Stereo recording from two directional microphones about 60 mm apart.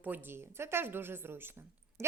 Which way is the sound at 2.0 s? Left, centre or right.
Right.